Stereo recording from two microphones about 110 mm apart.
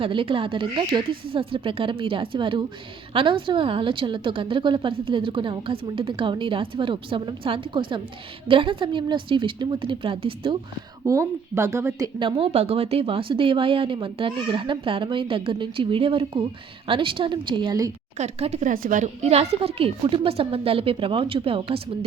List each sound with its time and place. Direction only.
0.0 s a woman's voice: 55° right (ahead or behind)
11.0 s speech: 30° right (ahead or behind)
12.5 s a woman's voice: 65° right (ahead or behind); by 17.9 s 35° right (ahead or behind)
18.2 s a woman's voice: 75° right (ahead or behind); by 21.8 s 55° right (ahead or behind)